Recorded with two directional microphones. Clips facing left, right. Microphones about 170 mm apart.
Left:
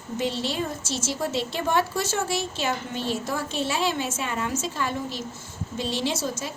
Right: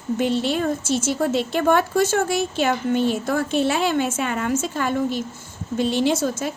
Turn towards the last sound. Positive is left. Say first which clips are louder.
# right 7 dB
turn(degrees=-55)  # may be behind; listen again after turning